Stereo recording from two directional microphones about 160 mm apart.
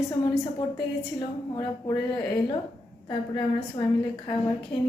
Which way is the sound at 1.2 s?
30° left (ahead or behind).